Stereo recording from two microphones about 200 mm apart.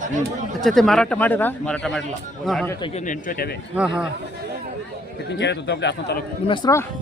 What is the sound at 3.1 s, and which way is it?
Speech, 45° left (ahead or behind).